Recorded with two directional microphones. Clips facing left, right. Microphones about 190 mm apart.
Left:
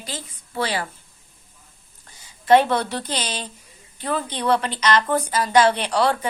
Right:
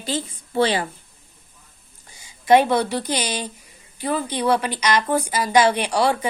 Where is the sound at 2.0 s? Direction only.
10° right (ahead or behind).